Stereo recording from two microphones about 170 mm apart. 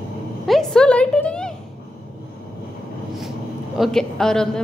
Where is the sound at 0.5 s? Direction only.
5° left (ahead or behind).